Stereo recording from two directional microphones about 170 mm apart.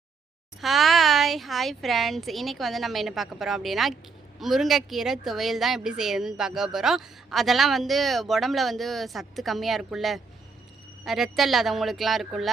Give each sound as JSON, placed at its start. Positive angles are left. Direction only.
{"t": 0.6, "sound": "speech", "side_deg": 0}